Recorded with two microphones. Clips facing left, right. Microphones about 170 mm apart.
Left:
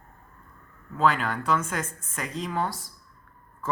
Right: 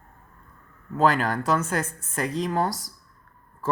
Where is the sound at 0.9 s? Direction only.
40° right (ahead or behind).